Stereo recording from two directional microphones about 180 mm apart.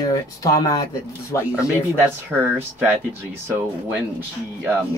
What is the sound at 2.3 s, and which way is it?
Speech, 10° right (ahead or behind).